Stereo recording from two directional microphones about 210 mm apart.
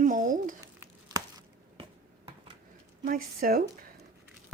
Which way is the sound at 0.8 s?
15° right (ahead or behind).